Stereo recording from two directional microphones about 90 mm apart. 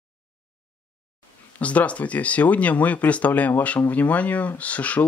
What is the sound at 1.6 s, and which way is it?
Speech, 15° left (ahead or behind).